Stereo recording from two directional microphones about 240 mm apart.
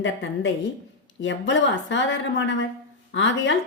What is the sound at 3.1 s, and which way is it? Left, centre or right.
Speech, left.